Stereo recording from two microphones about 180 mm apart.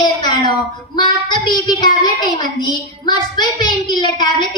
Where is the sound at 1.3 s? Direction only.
25° left (ahead or behind).